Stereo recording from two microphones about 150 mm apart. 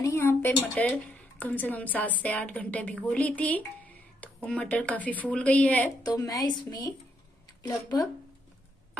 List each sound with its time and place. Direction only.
0.0 s a sound: 20° left (ahead or behind)
0.6 s speech: 10° left (ahead or behind)
6.0 s a woman's voice: 25° left (ahead or behind)